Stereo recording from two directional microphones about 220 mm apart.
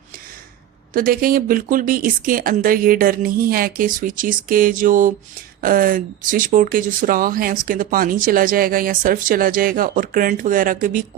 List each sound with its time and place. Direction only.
0.9 s speech: 40° right (ahead or behind)